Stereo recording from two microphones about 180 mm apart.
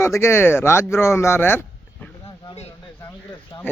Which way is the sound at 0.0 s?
15° left (ahead or behind).